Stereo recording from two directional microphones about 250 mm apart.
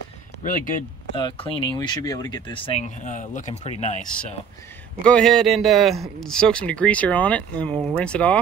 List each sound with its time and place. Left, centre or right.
0.4 s speech: left
1.1 s speech: centre
5.0 s speech: centre